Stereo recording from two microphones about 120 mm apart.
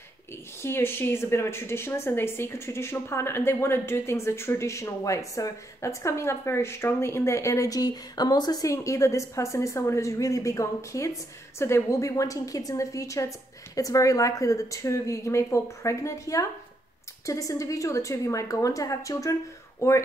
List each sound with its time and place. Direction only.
0.6 s a woman's voice: 20° left (ahead or behind)